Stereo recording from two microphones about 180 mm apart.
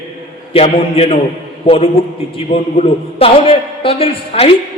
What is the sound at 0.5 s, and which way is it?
A man's voice, 35° left (ahead or behind).